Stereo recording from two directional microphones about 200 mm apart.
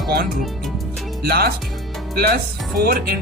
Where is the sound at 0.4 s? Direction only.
Centre (ahead or behind).